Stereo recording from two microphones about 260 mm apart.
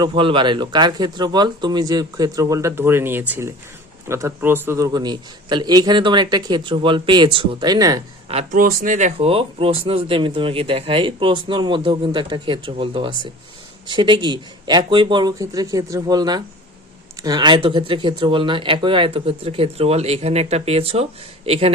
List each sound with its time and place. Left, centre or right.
0.0 s a man's voice: centre